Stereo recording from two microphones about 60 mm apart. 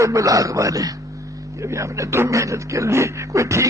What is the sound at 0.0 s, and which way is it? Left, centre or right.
Speech, right.